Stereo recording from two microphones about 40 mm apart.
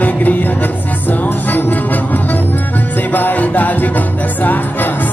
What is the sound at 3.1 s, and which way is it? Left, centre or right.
Music, left.